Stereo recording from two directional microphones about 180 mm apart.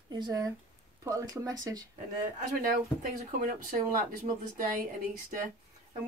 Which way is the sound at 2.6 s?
50° right (ahead or behind).